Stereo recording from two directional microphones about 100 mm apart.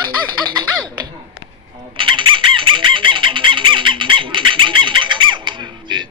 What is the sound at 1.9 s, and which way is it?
Chicken, 55° right (ahead or behind).